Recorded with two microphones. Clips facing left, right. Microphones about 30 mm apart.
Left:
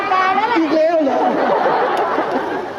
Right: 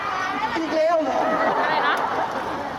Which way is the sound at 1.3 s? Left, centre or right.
Left.